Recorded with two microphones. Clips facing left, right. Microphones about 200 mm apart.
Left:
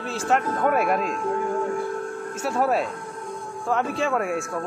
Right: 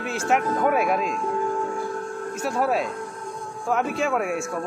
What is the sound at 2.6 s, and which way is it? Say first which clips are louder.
Speech: left 1 dB; centre (ahead or behind).